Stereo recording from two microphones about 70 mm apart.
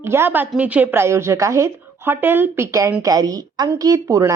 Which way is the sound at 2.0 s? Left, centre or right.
Right.